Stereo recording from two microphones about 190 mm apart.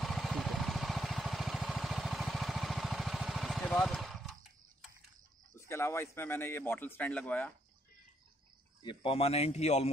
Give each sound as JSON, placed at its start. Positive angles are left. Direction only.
{"t": 0.0, "sound": "a sound", "side_deg": 0}
{"t": 5.6, "sound": "a man's voice", "side_deg": 15}
{"t": 8.8, "sound": "a man's voice", "side_deg": 30}